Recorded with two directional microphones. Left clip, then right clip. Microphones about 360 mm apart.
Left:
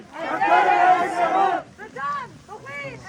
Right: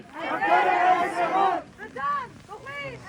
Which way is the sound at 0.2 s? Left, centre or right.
Left.